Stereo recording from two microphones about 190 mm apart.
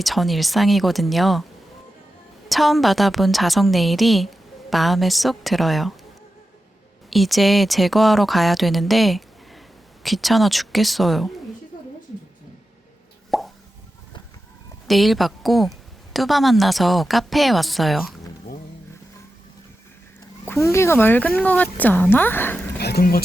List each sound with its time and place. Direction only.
0.0 s a woman's voice: centre (ahead or behind)
2.5 s a woman's voice: centre (ahead or behind)
7.1 s a woman's voice: centre (ahead or behind)
13.3 s plop: centre (ahead or behind)
14.8 s a woman's voice: centre (ahead or behind)
20.5 s speech: 15° left (ahead or behind)
22.8 s speech: 55° left (ahead or behind)